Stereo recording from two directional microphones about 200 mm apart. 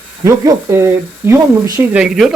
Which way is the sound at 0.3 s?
15° right (ahead or behind).